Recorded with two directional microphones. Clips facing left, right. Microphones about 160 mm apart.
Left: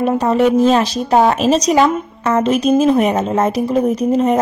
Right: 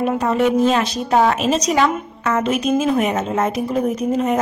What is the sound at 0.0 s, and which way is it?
A woman's voice, 35° left (ahead or behind).